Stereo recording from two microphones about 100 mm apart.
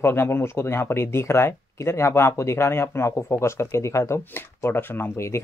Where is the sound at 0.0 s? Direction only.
25° left (ahead or behind).